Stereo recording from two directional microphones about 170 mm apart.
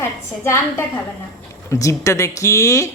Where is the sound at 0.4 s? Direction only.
15° left (ahead or behind).